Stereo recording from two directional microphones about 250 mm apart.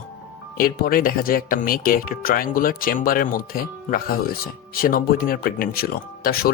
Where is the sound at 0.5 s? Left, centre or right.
Left.